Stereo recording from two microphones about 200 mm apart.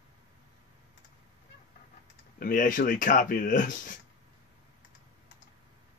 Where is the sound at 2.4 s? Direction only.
45° left (ahead or behind).